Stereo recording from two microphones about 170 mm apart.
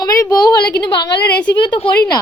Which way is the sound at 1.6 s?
30° left (ahead or behind).